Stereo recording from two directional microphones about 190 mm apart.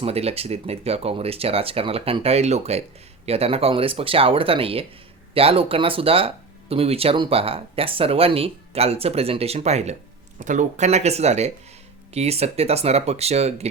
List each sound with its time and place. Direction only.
0.0 s speech: 30° right (ahead or behind)